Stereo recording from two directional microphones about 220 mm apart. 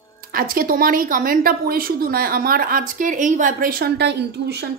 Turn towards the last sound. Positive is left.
turn(degrees=-50)  # may be behind; listen again after turning